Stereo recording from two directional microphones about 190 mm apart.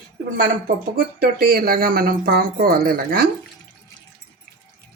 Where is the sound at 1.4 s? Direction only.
50° right (ahead or behind).